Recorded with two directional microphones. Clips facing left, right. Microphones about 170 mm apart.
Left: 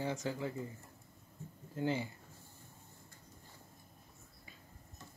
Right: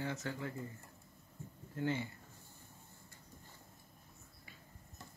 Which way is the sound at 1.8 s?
20° left (ahead or behind).